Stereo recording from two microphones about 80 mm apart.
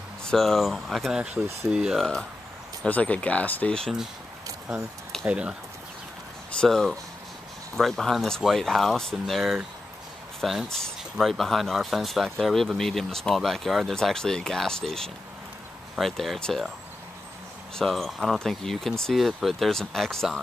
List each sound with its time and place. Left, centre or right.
0.2 s speech: centre
1.1 s speech: centre
2.0 s speech: centre
2.9 s speech: centre
5.2 s speech: centre
6.5 s speech: centre
10.7 s speech: centre
17.7 s speech: centre